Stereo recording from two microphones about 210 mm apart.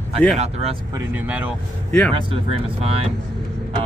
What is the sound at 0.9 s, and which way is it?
Speech, 5° right (ahead or behind).